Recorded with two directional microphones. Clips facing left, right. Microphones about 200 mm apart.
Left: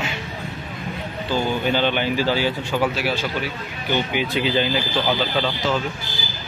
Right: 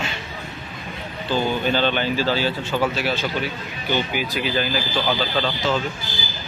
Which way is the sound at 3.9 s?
20° left (ahead or behind).